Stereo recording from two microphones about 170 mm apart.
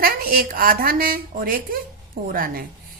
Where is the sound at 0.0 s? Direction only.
60° right (ahead or behind).